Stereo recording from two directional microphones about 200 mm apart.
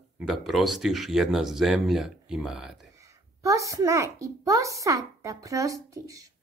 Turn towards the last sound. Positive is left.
turn(degrees=-15)  # may be behind; listen again after turning